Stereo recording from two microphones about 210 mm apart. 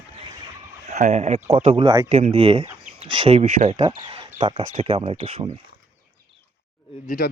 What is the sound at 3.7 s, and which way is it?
Speech, 20° right (ahead or behind).